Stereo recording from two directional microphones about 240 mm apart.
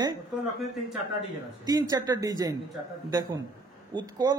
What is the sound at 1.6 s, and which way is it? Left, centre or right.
Speech, centre.